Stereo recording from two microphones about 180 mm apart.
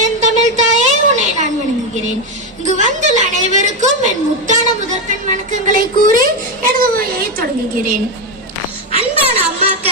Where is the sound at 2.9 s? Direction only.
40° right (ahead or behind).